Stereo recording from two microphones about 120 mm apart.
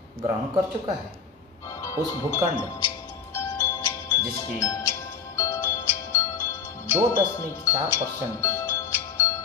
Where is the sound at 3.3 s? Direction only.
20° left (ahead or behind).